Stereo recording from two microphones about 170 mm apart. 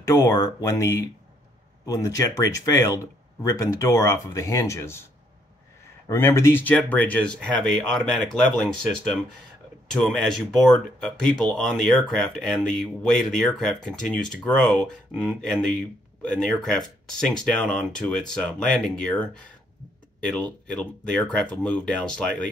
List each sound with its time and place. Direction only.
0.0 s speech: 15° left (ahead or behind)
6.0 s speech: 15° left (ahead or behind)